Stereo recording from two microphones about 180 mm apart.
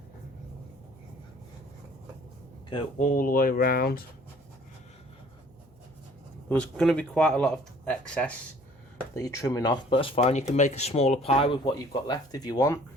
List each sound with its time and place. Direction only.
3.0 s speech: 50° left (ahead or behind)
6.5 s speech: 5° left (ahead or behind)
9.1 s speech: 15° left (ahead or behind)